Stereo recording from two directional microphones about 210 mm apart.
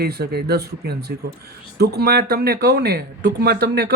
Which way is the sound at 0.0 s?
50° right (ahead or behind).